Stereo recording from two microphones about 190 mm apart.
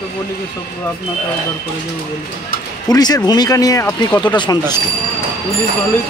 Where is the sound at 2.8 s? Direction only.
20° left (ahead or behind).